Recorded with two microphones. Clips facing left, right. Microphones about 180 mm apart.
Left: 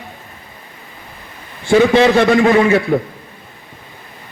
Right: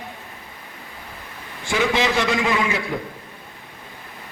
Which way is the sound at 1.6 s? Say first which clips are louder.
Left 11 dB; 60° left (ahead or behind).